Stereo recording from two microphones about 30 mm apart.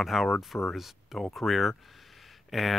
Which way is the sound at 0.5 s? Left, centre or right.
Left.